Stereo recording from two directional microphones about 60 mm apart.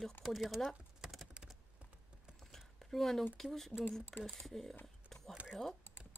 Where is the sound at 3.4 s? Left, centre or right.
Centre.